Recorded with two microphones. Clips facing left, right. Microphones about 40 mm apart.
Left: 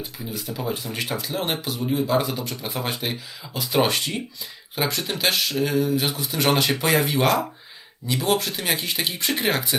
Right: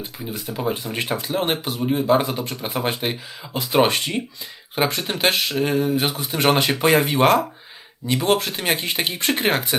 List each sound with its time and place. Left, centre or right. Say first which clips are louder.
0.3 s speech: right 3 dB; centre
4.7 s speech: right 3 dB; right
6.5 s speech: right 3 dB; centre
7.0 s speech: right 4 dB; right